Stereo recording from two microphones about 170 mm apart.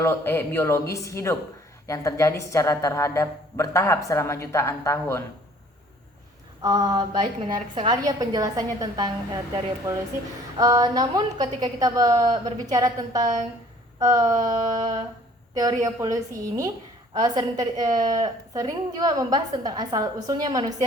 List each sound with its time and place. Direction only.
0.0 s a woman's voice: 15° left (ahead or behind)
6.6 s a woman's voice: 25° right (ahead or behind)